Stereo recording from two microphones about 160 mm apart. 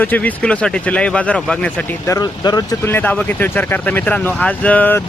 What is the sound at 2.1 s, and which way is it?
Speech, 25° left (ahead or behind).